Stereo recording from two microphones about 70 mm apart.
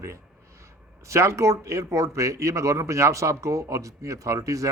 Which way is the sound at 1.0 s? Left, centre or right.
Right.